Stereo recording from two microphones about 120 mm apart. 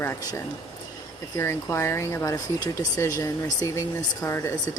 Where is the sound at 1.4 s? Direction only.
20° left (ahead or behind).